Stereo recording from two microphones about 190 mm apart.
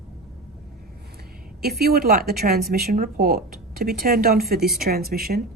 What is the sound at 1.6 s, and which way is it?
Speech, 55° right (ahead or behind).